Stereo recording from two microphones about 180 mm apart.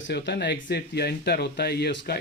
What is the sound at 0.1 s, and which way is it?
Speech, 70° left (ahead or behind).